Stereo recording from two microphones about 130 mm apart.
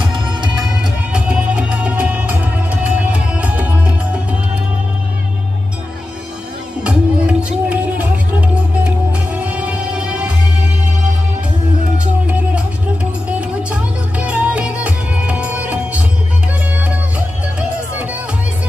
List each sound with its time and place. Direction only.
0.1 s music: 35° right (ahead or behind)
1.1 s music: 10° right (ahead or behind)
6.8 s music: 10° right (ahead or behind)
13.4 s music: 10° right (ahead or behind)